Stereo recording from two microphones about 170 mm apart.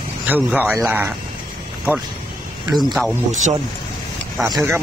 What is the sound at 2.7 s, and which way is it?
Speech, centre (ahead or behind).